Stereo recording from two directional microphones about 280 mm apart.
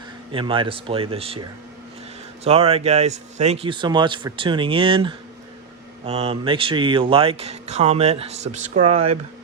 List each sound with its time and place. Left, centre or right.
0.3 s speech: centre